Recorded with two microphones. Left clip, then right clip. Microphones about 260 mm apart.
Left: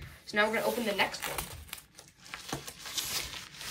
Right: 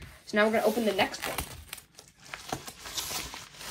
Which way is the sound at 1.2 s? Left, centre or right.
Right.